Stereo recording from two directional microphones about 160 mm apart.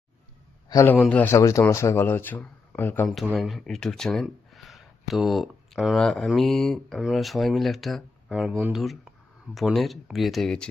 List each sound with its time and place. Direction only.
0.7 s a man's voice: 20° left (ahead or behind)
3.3 s speech: centre (ahead or behind)